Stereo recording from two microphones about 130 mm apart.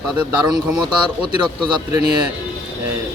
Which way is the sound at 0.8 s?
35° right (ahead or behind).